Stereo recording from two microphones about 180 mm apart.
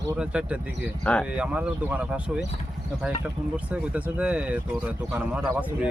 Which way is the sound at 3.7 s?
5° right (ahead or behind).